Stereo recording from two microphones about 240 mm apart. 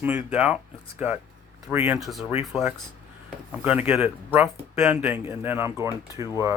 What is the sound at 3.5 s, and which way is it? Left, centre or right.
Speech, centre.